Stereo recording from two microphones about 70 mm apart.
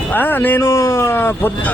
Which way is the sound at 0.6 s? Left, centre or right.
Left.